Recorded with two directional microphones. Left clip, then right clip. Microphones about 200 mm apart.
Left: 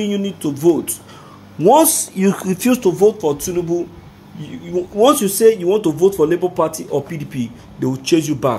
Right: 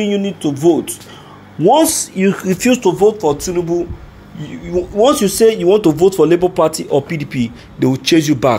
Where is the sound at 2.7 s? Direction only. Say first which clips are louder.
Right 1 dB; 20° left (ahead or behind).